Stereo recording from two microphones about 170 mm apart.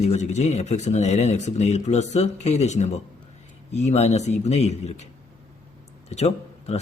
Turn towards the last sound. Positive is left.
turn(degrees=40)  # may be behind; listen again after turning